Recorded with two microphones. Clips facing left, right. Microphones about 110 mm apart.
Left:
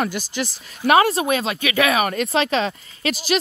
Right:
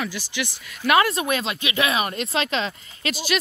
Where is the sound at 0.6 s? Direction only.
35° left (ahead or behind).